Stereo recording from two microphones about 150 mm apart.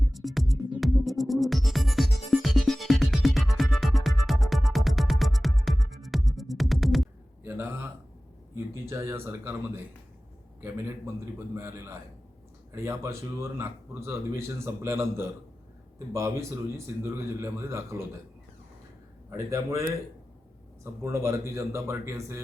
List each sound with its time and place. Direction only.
0.1 s music: centre (ahead or behind)
7.4 s a sound: 15° right (ahead or behind)
8.5 s speech: 15° right (ahead or behind)
19.3 s a man's voice: 20° right (ahead or behind)